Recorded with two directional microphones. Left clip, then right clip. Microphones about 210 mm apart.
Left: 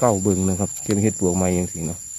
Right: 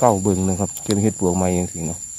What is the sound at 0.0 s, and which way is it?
Speech, centre (ahead or behind).